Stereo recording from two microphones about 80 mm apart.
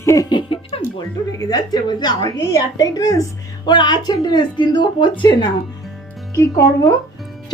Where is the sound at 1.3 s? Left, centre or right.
Left.